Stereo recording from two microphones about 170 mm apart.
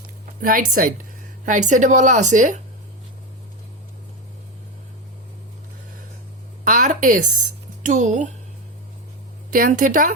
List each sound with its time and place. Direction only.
0.4 s a woman's voice: 55° right (ahead or behind)
6.7 s a woman's voice: 50° right (ahead or behind)
9.5 s a woman's voice: 50° right (ahead or behind)